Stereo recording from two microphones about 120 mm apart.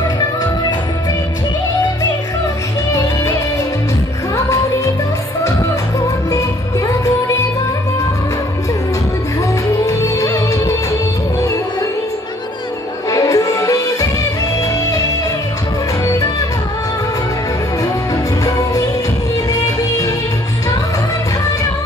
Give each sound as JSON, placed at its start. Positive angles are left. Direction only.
{"t": 9.8, "sound": "music", "side_deg": 25}
{"t": 13.1, "sound": "music", "side_deg": 30}
{"t": 18.1, "sound": "music", "side_deg": 30}